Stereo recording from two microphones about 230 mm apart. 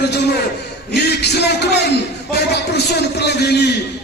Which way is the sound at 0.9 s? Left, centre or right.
Left.